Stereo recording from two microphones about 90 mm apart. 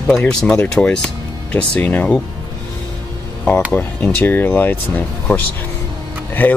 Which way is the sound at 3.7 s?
20° left (ahead or behind).